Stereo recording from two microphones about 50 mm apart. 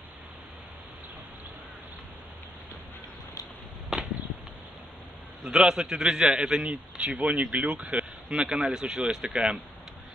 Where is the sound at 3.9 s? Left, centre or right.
Centre.